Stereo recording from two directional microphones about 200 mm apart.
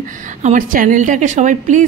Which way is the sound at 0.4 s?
40° right (ahead or behind).